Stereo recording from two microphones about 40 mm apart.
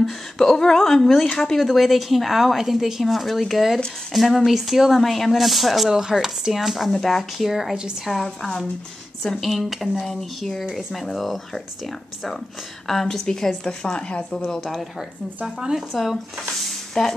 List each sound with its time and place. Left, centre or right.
0.0 s a woman's voice: centre
5.9 s speech: centre
6.9 s speech: centre
7.4 s a woman's voice: centre
8.4 s speech: centre
9.7 s a woman's voice: centre
10.0 s a woman's voice: centre
13.8 s speech: left
14.7 s speech: centre
15.9 s speech: centre